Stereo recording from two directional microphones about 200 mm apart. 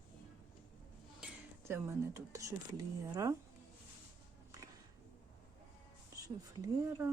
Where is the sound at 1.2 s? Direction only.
10° right (ahead or behind).